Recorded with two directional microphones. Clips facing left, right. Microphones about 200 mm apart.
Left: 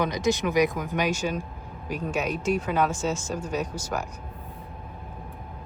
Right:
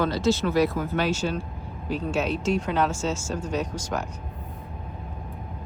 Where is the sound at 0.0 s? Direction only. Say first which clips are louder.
Right 2 dB; 15° left (ahead or behind).